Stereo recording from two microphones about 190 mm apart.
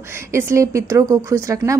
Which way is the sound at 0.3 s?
15° right (ahead or behind).